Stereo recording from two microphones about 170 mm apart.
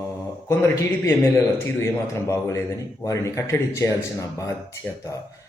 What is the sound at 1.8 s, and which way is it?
Speech, 15° left (ahead or behind).